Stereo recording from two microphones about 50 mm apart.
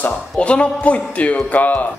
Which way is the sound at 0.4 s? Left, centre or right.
Left.